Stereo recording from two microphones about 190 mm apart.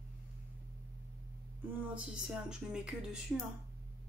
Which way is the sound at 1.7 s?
5° right (ahead or behind).